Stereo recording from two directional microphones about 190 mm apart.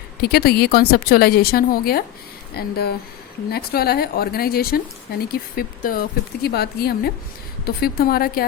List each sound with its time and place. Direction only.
0.2 s speech: 55° left (ahead or behind)